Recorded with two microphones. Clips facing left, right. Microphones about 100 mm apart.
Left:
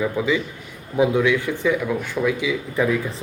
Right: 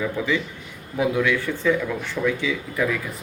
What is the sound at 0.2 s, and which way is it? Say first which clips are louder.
Speech: left 3 dB; 10° left (ahead or behind).